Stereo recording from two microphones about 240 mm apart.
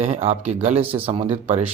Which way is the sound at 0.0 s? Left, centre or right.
Right.